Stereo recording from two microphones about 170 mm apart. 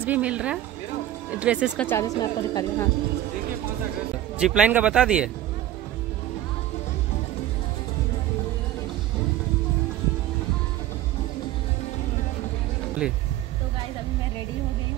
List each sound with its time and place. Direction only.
0.0 s a woman's voice: 10° right (ahead or behind)
1.8 s a woman's voice: 15° left (ahead or behind)
4.4 s speech: 5° right (ahead or behind)
13.0 s a woman's voice: 5° right (ahead or behind)